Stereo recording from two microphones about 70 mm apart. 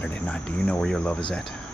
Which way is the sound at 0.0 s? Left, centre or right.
Left.